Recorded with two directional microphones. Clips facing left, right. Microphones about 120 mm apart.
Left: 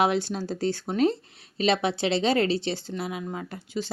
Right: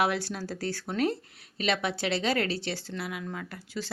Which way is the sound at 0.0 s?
20° left (ahead or behind).